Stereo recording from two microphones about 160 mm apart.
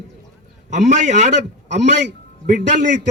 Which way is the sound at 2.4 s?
55° right (ahead or behind).